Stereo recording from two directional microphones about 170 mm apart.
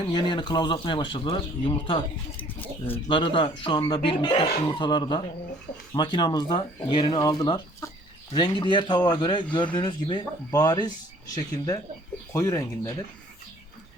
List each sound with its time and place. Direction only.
0.0 s speech: 25° left (ahead or behind)
2.3 s a sound: 10° left (ahead or behind)
3.1 s speech: 30° left (ahead or behind)